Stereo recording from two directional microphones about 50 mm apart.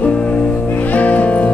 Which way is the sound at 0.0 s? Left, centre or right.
Left.